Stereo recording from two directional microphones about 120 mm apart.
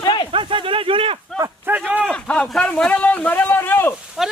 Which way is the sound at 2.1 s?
5° left (ahead or behind).